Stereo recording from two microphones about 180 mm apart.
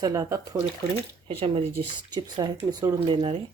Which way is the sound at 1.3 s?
30° right (ahead or behind).